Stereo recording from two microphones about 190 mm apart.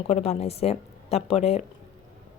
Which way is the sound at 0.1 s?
35° left (ahead or behind).